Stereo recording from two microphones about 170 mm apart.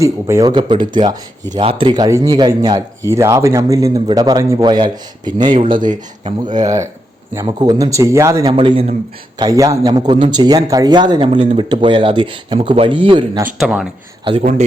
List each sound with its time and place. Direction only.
0.0 s speech: 15° right (ahead or behind)
0.5 s speech: 30° right (ahead or behind)
5.8 s speech: 45° right (ahead or behind)
6.6 s speech: 20° right (ahead or behind)
8.5 s a man's voice: 35° right (ahead or behind)
9.4 s speech: 20° right (ahead or behind)
13.4 s speech: 5° right (ahead or behind)